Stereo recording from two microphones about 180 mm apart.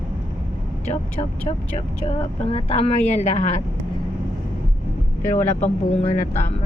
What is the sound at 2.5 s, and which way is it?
Speech, 35° left (ahead or behind).